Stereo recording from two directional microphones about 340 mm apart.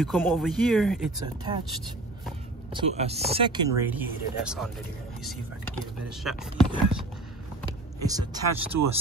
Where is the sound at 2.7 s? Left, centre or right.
Centre.